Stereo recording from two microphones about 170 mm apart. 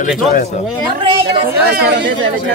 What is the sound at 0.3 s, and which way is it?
Speech, 50° left (ahead or behind).